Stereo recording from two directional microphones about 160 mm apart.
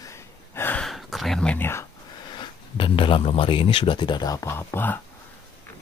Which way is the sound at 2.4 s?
30° left (ahead or behind).